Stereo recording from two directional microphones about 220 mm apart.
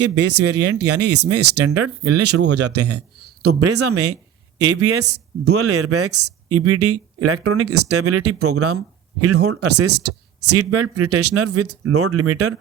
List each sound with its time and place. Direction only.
0.4 s speech: 50° right (ahead or behind)
1.4 s speech: 90° right
2.0 s speech: 50° right (ahead or behind)
2.5 s speech: 90° right